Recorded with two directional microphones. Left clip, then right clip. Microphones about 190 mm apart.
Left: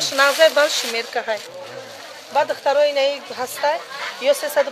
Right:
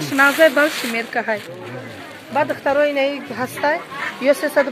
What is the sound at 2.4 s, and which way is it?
Speech, 60° left (ahead or behind).